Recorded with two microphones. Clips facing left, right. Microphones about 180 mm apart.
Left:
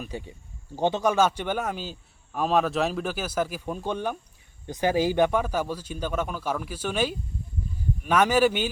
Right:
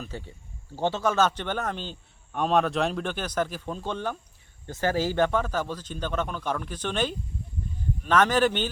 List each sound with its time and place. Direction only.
0.0 s a man's voice: 15° left (ahead or behind)